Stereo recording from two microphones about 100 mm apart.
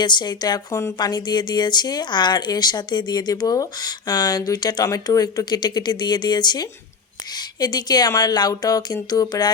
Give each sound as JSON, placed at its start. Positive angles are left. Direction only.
{"t": 0.0, "sound": "speech", "side_deg": 45}
{"t": 0.7, "sound": "speech", "side_deg": 30}
{"t": 0.9, "sound": "speech", "side_deg": 45}